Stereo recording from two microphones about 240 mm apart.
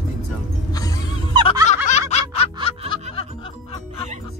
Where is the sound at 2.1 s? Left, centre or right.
Left.